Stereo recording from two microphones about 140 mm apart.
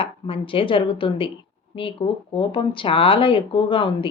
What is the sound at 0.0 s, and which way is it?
A woman's voice, 40° left (ahead or behind).